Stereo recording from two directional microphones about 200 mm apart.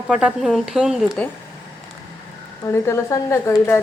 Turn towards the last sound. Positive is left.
turn(degrees=15)  # may be behind; listen again after turning